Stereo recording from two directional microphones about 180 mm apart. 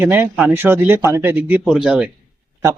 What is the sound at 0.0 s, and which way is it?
Speech, 10° right (ahead or behind).